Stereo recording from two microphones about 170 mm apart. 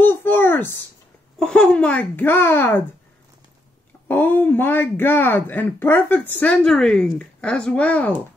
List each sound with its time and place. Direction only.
0.0 s a sound: 10° left (ahead or behind)
1.4 s speech: 5° left (ahead or behind)
4.1 s speech: 10° left (ahead or behind)